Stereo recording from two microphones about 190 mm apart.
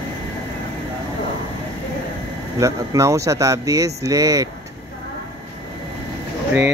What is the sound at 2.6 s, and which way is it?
Speech, 15° right (ahead or behind).